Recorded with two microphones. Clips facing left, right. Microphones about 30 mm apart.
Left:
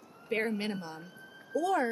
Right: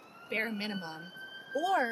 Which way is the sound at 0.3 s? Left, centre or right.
Centre.